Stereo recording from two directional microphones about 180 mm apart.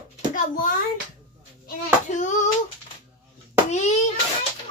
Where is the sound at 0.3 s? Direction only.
50° left (ahead or behind).